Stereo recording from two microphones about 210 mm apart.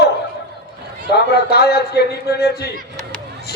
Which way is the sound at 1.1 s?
50° left (ahead or behind).